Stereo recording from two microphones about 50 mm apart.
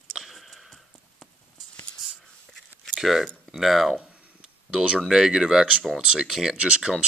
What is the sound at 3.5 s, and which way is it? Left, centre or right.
Speech, centre.